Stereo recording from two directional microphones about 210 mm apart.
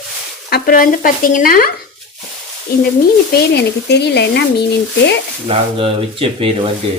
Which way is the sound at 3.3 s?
55° left (ahead or behind).